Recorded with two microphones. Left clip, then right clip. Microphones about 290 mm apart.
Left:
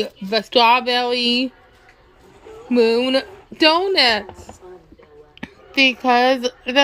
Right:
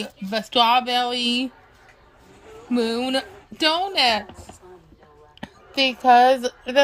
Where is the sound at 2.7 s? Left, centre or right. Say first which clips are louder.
Left 7 dB; centre.